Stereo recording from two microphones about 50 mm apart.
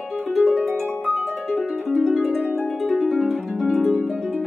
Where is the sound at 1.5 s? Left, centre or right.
Centre.